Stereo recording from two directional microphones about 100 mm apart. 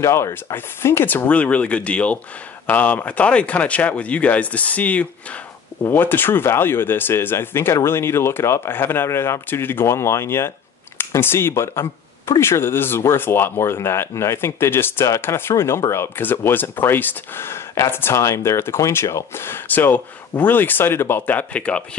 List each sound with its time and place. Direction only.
0.0 s speech: 30° left (ahead or behind); by 21.8 s 10° left (ahead or behind)